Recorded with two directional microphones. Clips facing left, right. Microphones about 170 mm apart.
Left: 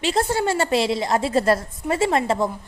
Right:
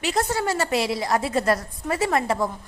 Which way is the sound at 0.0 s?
30° left (ahead or behind).